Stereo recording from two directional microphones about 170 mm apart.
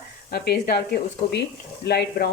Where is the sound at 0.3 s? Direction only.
70° left (ahead or behind).